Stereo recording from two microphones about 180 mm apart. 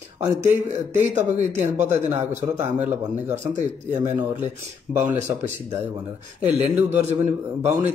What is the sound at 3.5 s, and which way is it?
Speech, 45° right (ahead or behind).